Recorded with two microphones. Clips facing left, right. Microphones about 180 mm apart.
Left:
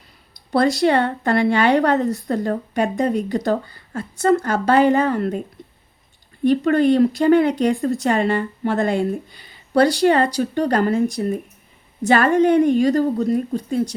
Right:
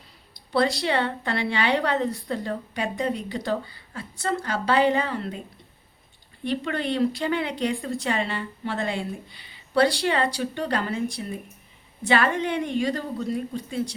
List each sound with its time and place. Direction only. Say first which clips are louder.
0.5 s speech: left 7 dB; 45° left (ahead or behind)
5.6 s a sound: left 11 dB; 45° left (ahead or behind)
6.4 s speech: left 12 dB; 45° left (ahead or behind)